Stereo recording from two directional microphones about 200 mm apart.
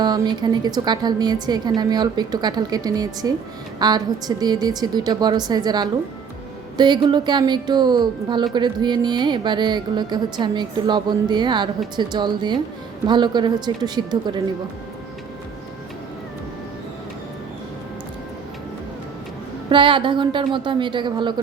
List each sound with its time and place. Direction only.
0.0 s a woman's voice: 20° right (ahead or behind)
19.7 s a woman's voice: 25° right (ahead or behind)